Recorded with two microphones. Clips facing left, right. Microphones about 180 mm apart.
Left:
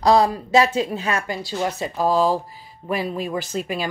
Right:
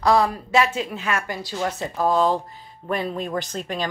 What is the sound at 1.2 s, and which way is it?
Speech, 20° left (ahead or behind).